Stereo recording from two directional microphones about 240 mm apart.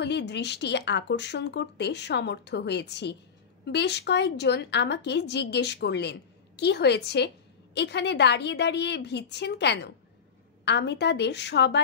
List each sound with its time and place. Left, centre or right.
0.0 s a woman's voice: left